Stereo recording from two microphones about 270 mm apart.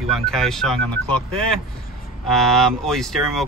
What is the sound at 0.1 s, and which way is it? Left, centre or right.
Speech, centre.